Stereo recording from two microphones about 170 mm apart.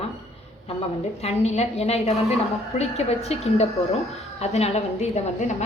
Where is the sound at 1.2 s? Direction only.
40° left (ahead or behind).